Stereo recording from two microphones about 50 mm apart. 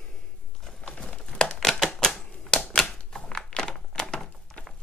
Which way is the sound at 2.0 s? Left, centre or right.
Centre.